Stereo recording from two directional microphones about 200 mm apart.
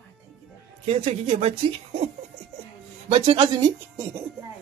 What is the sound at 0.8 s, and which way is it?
Speech, 30° right (ahead or behind).